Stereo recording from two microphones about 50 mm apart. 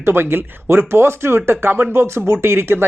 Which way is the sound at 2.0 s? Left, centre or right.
Right.